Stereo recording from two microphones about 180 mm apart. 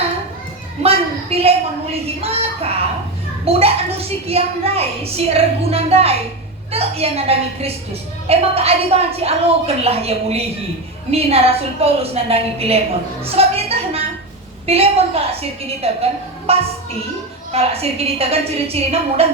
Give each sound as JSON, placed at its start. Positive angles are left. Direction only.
{"t": 0.8, "sound": "a sound", "side_deg": -35}
{"t": 2.0, "sound": "a woman's voice", "side_deg": -35}
{"t": 13.2, "sound": "music", "side_deg": -35}
{"t": 14.7, "sound": "a woman's voice", "side_deg": -35}